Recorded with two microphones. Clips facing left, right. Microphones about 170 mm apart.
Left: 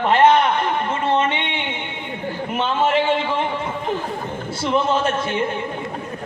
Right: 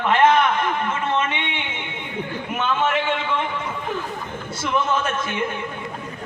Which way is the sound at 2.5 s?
30° left (ahead or behind).